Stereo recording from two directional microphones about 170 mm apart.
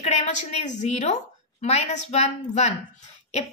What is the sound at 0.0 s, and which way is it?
A woman's voice, 45° left (ahead or behind).